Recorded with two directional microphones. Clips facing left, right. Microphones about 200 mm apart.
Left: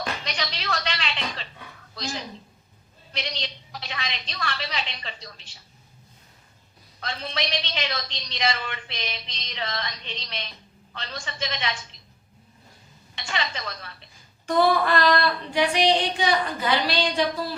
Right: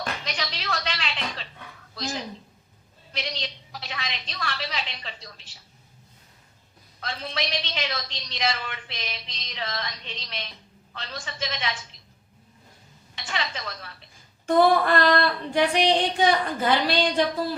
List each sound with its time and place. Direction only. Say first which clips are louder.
0.3 s a sound: left 1 dB; centre (ahead or behind)
2.0 s a woman's voice: right 1 dB; centre (ahead or behind)
7.0 s a woman's voice: left 1 dB; centre (ahead or behind)
13.1 s a woman's voice: left 1 dB; centre (ahead or behind)
14.4 s female singing: right 2 dB; 50° right (ahead or behind)